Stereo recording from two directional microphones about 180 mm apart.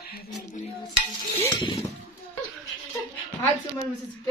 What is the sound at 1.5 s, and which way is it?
Speech, 25° left (ahead or behind).